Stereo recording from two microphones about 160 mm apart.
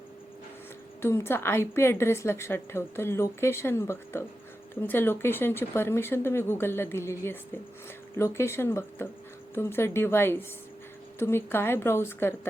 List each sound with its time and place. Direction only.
1.0 s a woman's voice: 15° left (ahead or behind)